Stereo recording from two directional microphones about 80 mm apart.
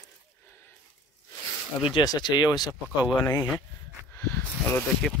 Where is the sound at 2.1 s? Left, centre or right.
Left.